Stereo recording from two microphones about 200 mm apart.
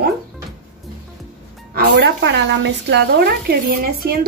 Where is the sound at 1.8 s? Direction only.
60° right (ahead or behind).